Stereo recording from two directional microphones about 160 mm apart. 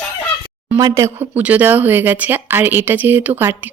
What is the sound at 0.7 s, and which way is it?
Speech, 20° right (ahead or behind).